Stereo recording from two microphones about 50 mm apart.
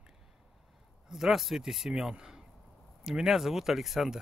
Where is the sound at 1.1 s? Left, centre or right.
Centre.